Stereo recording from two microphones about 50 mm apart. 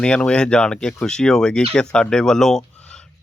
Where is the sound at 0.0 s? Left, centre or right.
Centre.